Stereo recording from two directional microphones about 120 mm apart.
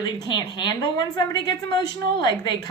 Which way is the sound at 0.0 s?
40° left (ahead or behind).